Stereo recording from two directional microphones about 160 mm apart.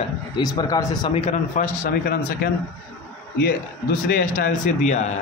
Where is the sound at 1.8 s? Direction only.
70° left (ahead or behind).